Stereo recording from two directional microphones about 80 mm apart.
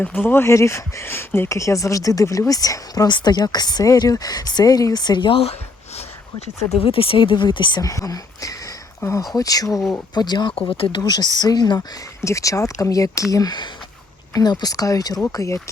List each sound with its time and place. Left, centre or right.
0.0 s speech: left
3.1 s speech: left
7.2 s speech: left
7.8 s speech: left
10.2 s speech: left
12.2 s speech: left
13.3 s speech: left
15.3 s speech: left